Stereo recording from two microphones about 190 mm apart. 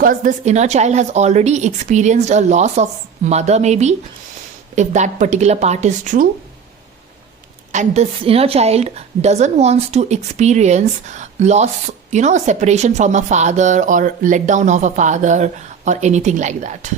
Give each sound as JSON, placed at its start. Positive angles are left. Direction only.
{"t": 0.0, "sound": "a woman's voice", "side_deg": -45}
{"t": 7.7, "sound": "a woman's voice", "side_deg": -35}